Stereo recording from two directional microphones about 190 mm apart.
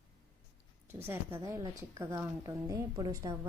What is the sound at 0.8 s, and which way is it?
A woman's voice, 10° right (ahead or behind).